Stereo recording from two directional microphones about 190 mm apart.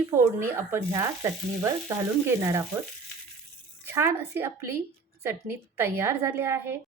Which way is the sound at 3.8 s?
15° right (ahead or behind).